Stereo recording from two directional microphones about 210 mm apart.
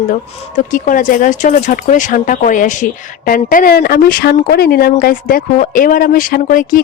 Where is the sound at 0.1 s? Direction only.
40° left (ahead or behind).